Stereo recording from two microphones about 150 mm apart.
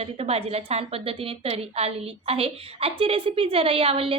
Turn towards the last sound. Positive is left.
turn(degrees=-40)  # may be behind; listen again after turning